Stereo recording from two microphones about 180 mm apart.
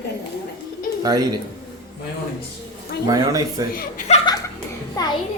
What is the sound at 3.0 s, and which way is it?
Speech, 20° right (ahead or behind).